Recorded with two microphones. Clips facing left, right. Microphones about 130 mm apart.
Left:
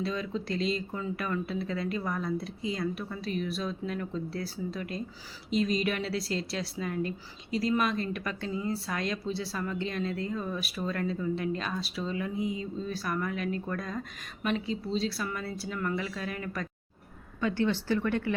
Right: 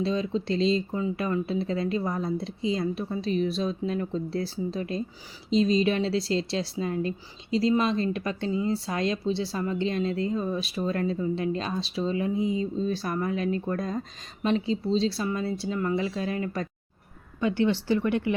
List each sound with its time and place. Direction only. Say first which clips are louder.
0.0 s speech: right 6 dB; 25° right (ahead or behind)
17.4 s speech: right 4 dB; 15° right (ahead or behind)